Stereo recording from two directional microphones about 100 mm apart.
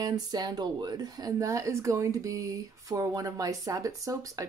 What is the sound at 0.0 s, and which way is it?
Speech, 40° right (ahead or behind).